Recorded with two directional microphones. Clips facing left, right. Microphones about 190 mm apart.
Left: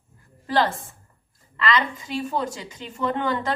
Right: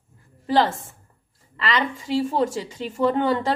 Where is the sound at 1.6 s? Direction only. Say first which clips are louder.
Left 1 dB; 30° right (ahead or behind).